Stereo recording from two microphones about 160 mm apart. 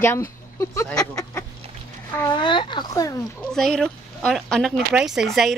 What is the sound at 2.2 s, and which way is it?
Speech, 30° left (ahead or behind).